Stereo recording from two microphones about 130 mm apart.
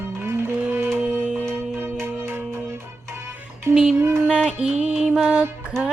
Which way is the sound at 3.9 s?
20° right (ahead or behind).